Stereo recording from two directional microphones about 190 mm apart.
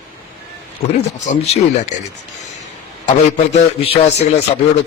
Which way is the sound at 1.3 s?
40° left (ahead or behind).